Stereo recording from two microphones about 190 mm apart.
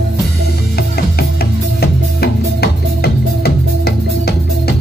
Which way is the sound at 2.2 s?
55° left (ahead or behind).